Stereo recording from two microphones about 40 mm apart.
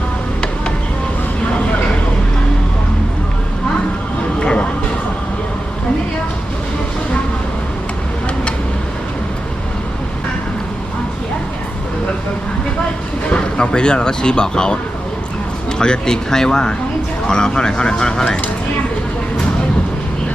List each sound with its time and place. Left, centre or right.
4.4 s music: left
13.3 s speech: left
15.8 s speech: centre